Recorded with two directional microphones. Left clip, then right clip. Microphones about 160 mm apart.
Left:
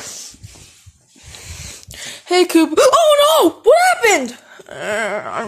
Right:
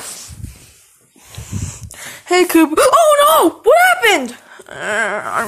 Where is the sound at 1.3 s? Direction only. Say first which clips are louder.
Right 2 dB; 20° left (ahead or behind).